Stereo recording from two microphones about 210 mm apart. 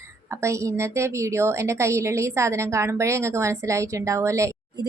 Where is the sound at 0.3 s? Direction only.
15° right (ahead or behind).